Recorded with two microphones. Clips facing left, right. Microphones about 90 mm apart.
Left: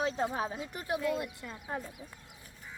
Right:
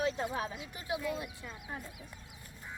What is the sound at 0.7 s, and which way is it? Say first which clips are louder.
Speech: left 3 dB; 50° left (ahead or behind).